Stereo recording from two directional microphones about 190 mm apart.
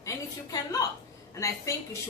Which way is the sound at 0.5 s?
20° left (ahead or behind).